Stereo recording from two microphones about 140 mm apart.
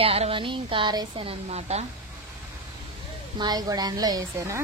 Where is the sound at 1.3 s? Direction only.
50° right (ahead or behind).